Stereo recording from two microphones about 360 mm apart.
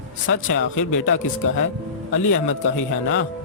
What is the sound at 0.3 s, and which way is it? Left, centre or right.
Speech, left.